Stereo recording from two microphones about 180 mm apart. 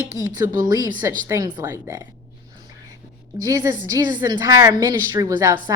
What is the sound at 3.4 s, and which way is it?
A woman's voice, 15° right (ahead or behind).